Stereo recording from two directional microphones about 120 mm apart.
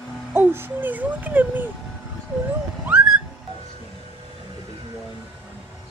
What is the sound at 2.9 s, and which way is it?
Whistling, 10° right (ahead or behind).